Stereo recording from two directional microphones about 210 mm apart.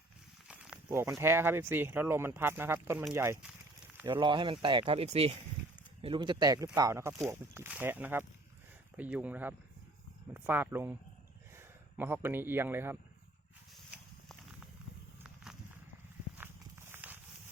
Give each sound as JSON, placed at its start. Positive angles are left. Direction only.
{"t": 0.4, "sound": "speech", "side_deg": -5}
{"t": 3.9, "sound": "speech", "side_deg": -20}
{"t": 16.9, "sound": "a sound", "side_deg": -10}